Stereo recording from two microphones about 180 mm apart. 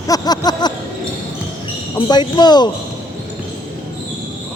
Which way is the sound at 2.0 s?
25° left (ahead or behind).